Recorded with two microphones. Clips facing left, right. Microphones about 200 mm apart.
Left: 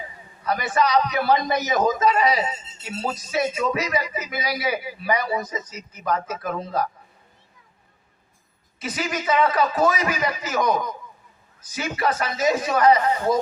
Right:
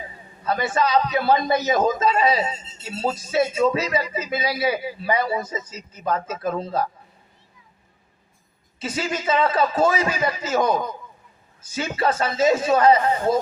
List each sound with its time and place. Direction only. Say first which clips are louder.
0.4 s speech: even; 25° right (ahead or behind)
8.8 s speech: right 1 dB; 25° right (ahead or behind)